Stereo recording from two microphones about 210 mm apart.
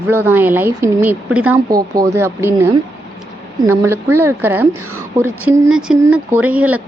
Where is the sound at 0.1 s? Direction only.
10° right (ahead or behind).